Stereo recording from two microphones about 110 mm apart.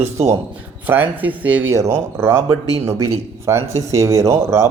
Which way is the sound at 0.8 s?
15° right (ahead or behind).